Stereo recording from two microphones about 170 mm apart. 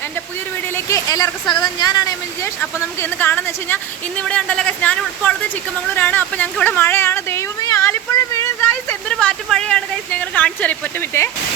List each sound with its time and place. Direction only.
0.7 s speech: 15° left (ahead or behind)